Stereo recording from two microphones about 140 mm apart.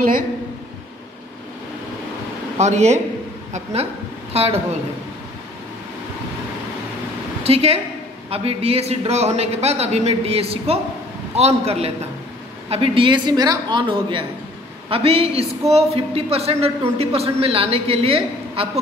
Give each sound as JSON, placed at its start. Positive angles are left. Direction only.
{"t": 2.6, "sound": "a man's voice", "side_deg": -55}
{"t": 4.3, "sound": "speech", "side_deg": -45}
{"t": 7.4, "sound": "a man's voice", "side_deg": -45}